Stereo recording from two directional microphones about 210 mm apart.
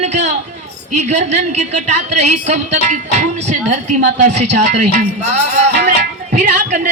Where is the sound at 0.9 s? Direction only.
35° right (ahead or behind).